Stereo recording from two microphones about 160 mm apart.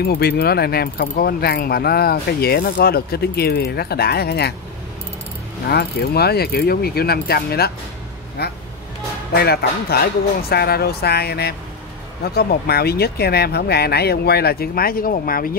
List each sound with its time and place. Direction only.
0.0 s speech: 80° left
5.7 s speech: 85° left; by 15.5 s 65° left (ahead or behind)